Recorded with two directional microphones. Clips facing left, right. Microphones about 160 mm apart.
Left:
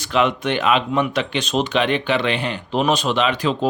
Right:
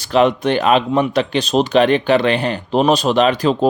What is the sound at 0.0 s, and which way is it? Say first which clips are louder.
Speech: right 5 dB; 35° right (ahead or behind).